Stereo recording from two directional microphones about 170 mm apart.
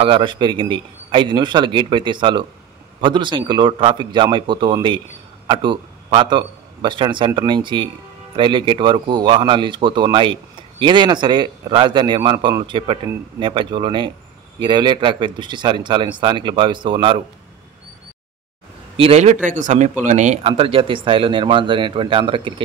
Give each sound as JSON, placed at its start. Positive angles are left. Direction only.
{"t": 0.0, "sound": "a man's voice", "side_deg": -30}
{"t": 18.9, "sound": "speech", "side_deg": -35}